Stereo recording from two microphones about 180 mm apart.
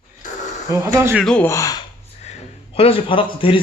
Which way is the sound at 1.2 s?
5° left (ahead or behind).